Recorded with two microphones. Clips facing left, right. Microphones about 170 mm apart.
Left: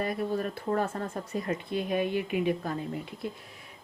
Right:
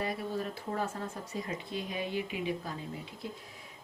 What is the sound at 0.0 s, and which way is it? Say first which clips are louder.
Speech: left 5 dB; 55° left (ahead or behind).